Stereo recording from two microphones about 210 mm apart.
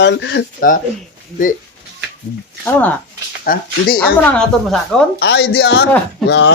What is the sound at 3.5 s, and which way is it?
Speech, 45° left (ahead or behind).